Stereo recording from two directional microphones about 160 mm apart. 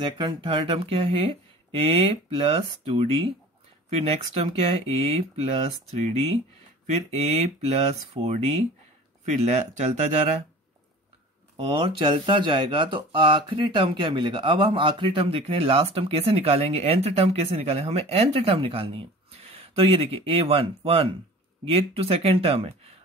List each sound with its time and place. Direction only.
0.0 s speech: 30° right (ahead or behind); by 10.3 s 45° right (ahead or behind)
11.6 s speech: 35° right (ahead or behind)